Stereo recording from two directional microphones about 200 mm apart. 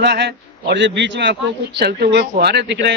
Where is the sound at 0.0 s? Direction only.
60° right (ahead or behind).